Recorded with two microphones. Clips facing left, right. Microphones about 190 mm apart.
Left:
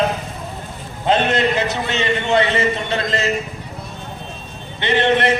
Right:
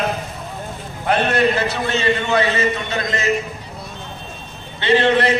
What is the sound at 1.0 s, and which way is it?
A man's voice, 20° left (ahead or behind).